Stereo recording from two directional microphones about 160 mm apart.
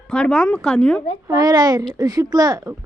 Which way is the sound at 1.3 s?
25° right (ahead or behind).